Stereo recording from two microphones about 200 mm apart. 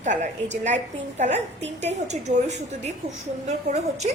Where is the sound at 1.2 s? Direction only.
35° right (ahead or behind).